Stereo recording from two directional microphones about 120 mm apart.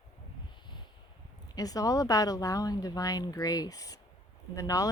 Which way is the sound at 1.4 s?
30° left (ahead or behind).